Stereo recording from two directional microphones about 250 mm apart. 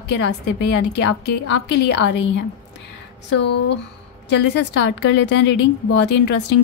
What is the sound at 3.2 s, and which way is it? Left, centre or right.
A woman's voice, left.